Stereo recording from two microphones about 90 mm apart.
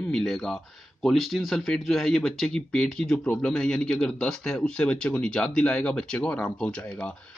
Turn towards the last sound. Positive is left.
turn(degrees=10)  # may be behind; listen again after turning